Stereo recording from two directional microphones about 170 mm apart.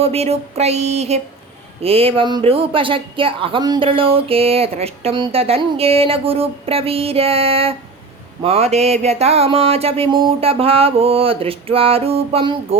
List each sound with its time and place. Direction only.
0.0 s speech: 35° right (ahead or behind)